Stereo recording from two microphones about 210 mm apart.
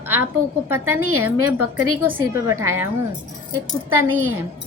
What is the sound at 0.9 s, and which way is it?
Speech, 90° right.